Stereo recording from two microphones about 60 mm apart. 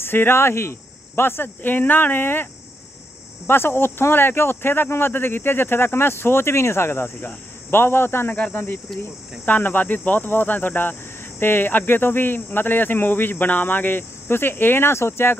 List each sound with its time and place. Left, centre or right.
0.0 s speech: left
3.4 s speech: left
8.4 s speech: left